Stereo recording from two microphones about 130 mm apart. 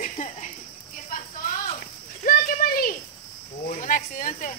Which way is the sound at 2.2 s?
90° left.